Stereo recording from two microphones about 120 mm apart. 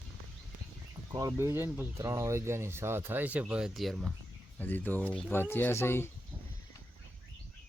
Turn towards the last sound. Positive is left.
turn(degrees=20)  # may be behind; listen again after turning